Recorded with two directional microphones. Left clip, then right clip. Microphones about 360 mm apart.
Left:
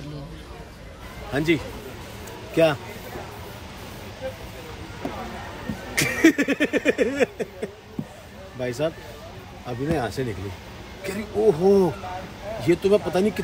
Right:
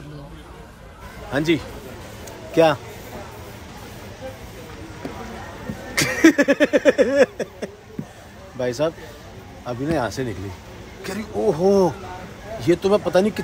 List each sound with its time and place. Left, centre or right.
1.3 s speech: centre
5.9 s a sound: centre
8.5 s speech: centre